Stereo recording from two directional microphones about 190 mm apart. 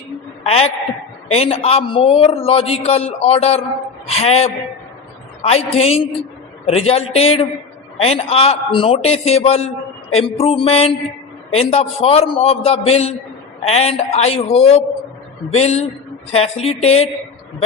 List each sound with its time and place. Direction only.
0.4 s a man's voice: 30° left (ahead or behind)